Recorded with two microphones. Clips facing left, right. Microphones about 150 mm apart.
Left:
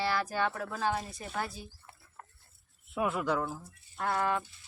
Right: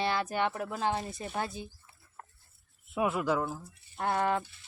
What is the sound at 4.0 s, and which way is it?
Speech, 30° right (ahead or behind).